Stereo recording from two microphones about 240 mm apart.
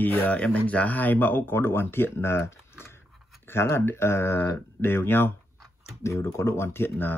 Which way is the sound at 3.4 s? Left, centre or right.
Centre.